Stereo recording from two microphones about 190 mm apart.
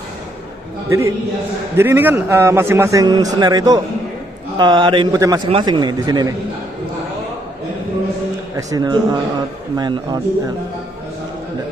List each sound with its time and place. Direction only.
0.8 s a man's voice: 15° right (ahead or behind)
8.5 s a man's voice: 20° right (ahead or behind)